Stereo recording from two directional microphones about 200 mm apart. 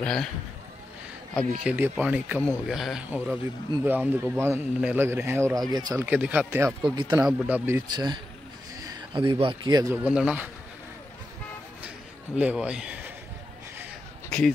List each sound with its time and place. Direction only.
0.0 s a man's voice: 5° left (ahead or behind)
1.6 s a man's voice: 5° right (ahead or behind)
6.0 s a man's voice: 10° right (ahead or behind)
7.9 s speech: 20° right (ahead or behind)
10.0 s a man's voice: 5° right (ahead or behind)
12.4 s speech: 5° right (ahead or behind)